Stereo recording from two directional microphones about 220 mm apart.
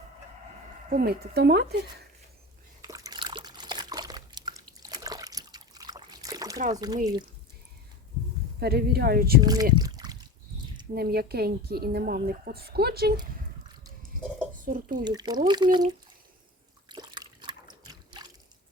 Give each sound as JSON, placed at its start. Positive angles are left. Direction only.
{"t": 0.9, "sound": "a woman's voice", "side_deg": -40}
{"t": 2.8, "sound": "liquid", "side_deg": -15}
{"t": 6.7, "sound": "speech", "side_deg": -15}
{"t": 8.5, "sound": "a woman's voice", "side_deg": -45}
{"t": 9.4, "sound": "speech", "side_deg": -15}
{"t": 9.7, "sound": "a sound", "side_deg": -15}
{"t": 10.9, "sound": "a woman's voice", "side_deg": -45}
{"t": 14.6, "sound": "speech", "side_deg": -40}
{"t": 15.0, "sound": "speech", "side_deg": -20}
{"t": 16.9, "sound": "trickle", "side_deg": -20}